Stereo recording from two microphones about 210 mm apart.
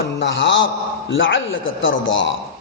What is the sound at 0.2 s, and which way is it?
A man's voice, 60° left (ahead or behind).